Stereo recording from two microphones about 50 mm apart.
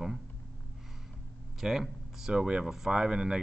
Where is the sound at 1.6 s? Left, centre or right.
Centre.